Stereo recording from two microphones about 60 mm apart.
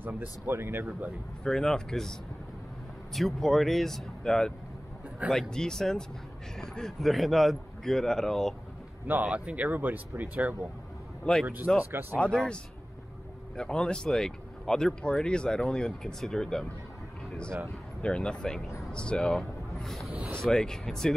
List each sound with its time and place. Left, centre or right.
0.0 s speech: right
1.4 s speech: centre
9.0 s speech: right
11.3 s speech: centre
11.9 s speech: right
12.2 s speech: centre
13.6 s speech: centre
18.0 s speech: centre
19.7 s a sound: centre
20.3 s speech: centre